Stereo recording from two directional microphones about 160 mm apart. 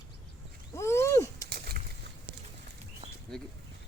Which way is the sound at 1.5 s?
75° right (ahead or behind).